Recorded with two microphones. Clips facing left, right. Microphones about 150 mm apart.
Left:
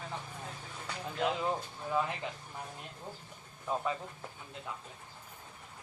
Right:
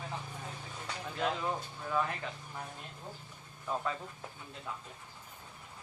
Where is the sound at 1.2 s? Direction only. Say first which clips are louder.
Left 2 dB; 20° left (ahead or behind).